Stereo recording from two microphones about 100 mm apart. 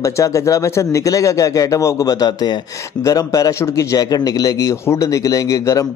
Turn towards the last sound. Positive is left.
turn(degrees=35)  # may be behind; listen again after turning